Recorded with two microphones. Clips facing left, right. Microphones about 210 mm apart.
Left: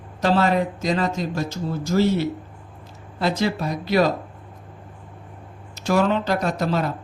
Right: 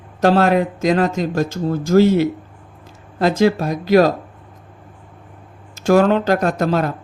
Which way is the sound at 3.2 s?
45° right (ahead or behind).